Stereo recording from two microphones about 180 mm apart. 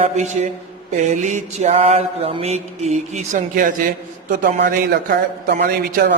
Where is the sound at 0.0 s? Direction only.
40° right (ahead or behind).